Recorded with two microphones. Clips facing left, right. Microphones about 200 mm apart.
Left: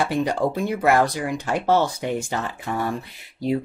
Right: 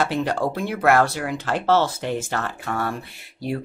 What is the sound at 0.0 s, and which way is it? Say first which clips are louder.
Speech: left 1 dB; 15° left (ahead or behind).